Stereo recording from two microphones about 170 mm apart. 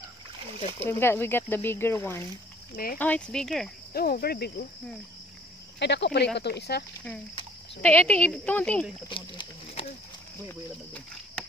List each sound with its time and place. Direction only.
0.8 s speech: 15° left (ahead or behind)
2.7 s cricket: 60° left (ahead or behind)
3.0 s speech: 5° left (ahead or behind)
3.9 s cricket: 60° left (ahead or behind)
5.8 s speech: 90° left
7.8 s speech: 10° left (ahead or behind)
9.1 s a sound: 30° left (ahead or behind)
10.5 s speech: 5° left (ahead or behind)